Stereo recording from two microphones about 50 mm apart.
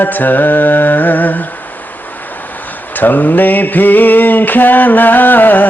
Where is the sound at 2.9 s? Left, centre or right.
Left.